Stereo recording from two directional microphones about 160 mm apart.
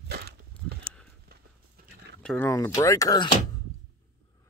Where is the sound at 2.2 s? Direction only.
10° left (ahead or behind).